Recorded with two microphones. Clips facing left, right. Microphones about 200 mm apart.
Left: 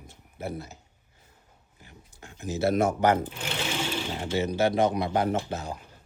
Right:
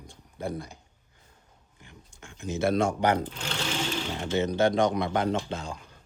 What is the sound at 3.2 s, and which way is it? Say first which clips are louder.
Speech: left 1 dB; 10° left (ahead or behind).